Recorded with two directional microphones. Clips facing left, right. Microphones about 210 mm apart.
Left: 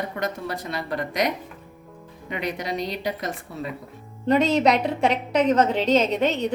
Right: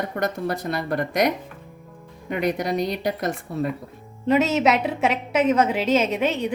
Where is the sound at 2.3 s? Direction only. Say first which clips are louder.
Right 5 dB; 50° right (ahead or behind).